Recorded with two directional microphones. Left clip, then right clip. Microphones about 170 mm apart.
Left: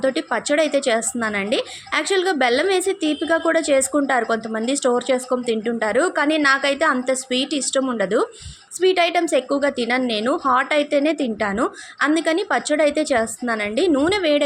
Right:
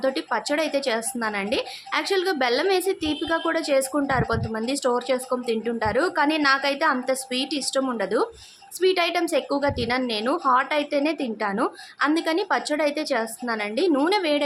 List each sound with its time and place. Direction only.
0.0 s a woman's voice: 15° left (ahead or behind)